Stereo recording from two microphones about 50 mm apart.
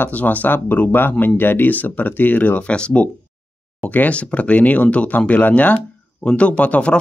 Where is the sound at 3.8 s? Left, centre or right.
Left.